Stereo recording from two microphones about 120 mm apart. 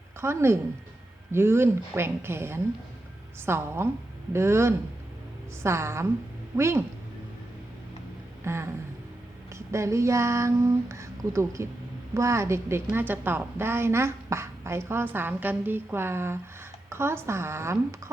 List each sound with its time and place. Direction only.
0.2 s a woman's voice: 20° right (ahead or behind)
8.4 s a woman's voice: 20° right (ahead or behind)
9.7 s a woman's voice: 25° right (ahead or behind)